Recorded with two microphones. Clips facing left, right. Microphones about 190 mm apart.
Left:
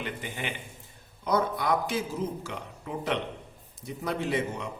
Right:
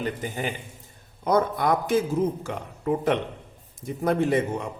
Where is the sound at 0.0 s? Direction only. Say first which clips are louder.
Right 6 dB; 40° right (ahead or behind).